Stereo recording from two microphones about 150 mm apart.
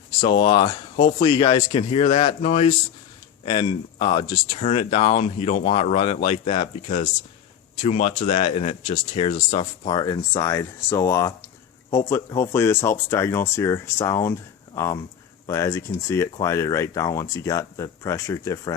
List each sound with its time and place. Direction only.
0.2 s speech: 30° left (ahead or behind)
3.4 s speech: 35° left (ahead or behind)
4.5 s speech: 45° left (ahead or behind); by 18.7 s 20° left (ahead or behind)